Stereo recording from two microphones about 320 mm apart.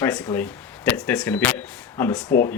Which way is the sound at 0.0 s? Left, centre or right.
Centre.